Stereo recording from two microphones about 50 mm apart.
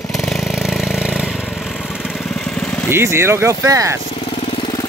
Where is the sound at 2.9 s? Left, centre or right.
Right.